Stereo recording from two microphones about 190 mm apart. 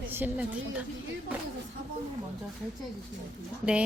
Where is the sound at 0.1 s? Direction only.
10° right (ahead or behind).